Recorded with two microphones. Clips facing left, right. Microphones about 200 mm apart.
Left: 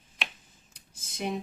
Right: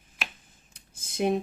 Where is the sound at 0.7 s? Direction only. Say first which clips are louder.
Right 1 dB; 55° right (ahead or behind).